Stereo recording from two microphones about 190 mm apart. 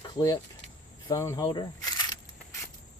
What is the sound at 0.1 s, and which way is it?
Speech, 20° left (ahead or behind).